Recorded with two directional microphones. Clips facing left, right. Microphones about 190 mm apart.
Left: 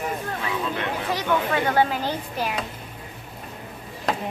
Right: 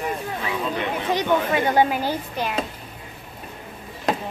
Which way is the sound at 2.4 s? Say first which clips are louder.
Even; 5° left (ahead or behind).